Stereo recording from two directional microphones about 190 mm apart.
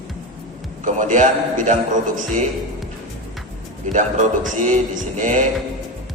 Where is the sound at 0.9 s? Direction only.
40° right (ahead or behind).